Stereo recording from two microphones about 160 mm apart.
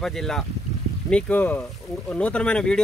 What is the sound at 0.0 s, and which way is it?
Speech, 5° left (ahead or behind).